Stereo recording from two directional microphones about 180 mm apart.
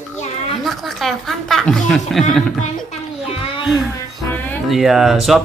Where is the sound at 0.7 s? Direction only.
Centre (ahead or behind).